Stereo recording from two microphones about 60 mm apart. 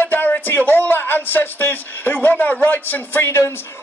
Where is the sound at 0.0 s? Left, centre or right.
Left.